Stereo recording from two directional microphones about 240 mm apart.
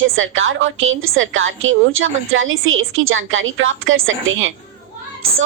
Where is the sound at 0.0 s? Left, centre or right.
Right.